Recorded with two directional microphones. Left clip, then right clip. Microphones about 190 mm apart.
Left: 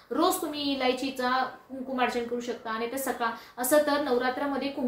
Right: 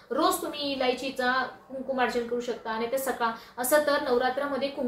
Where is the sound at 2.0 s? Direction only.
15° left (ahead or behind).